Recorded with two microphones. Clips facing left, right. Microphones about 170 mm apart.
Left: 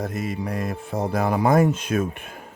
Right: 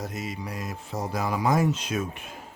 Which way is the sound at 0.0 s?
55° left (ahead or behind).